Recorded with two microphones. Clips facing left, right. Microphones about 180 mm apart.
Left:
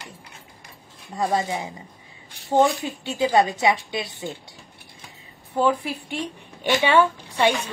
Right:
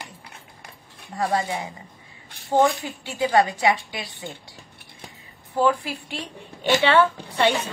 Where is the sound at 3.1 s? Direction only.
20° left (ahead or behind).